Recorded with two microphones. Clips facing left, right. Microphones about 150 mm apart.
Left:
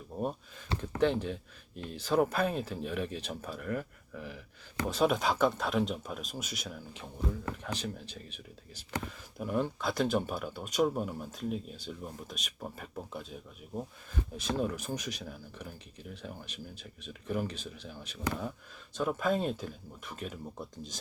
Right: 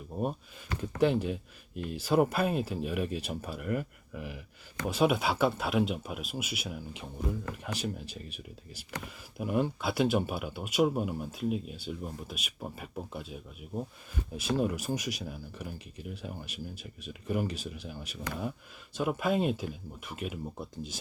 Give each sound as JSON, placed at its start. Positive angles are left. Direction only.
{"t": 0.1, "sound": "speech", "side_deg": -20}